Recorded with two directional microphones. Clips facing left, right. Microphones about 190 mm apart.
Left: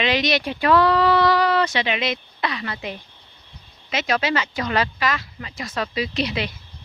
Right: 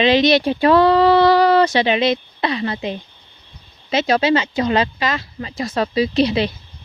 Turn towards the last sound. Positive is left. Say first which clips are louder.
# right 8 dB
turn(degrees=-30)  # may be behind; listen again after turning